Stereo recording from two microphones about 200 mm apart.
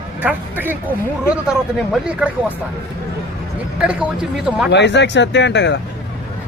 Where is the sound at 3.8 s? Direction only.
5° right (ahead or behind).